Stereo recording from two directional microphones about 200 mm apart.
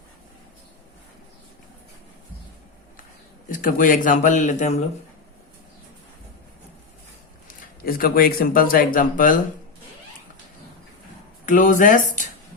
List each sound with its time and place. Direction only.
3.5 s speech: 45° left (ahead or behind)
7.9 s speech: 50° left (ahead or behind)
11.4 s speech: 40° left (ahead or behind)